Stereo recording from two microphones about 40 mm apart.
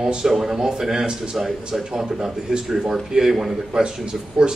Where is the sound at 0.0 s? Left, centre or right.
Centre.